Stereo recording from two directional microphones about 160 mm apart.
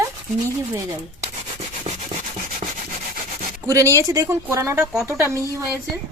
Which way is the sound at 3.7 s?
20° right (ahead or behind).